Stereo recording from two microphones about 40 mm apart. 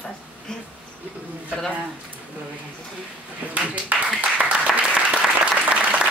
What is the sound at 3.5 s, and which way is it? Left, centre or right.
Applause, right.